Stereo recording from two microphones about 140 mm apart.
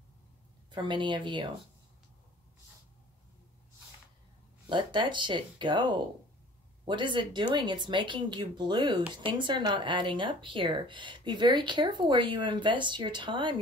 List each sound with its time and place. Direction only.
0.7 s speech: 35° right (ahead or behind)
4.6 s speech: 35° right (ahead or behind)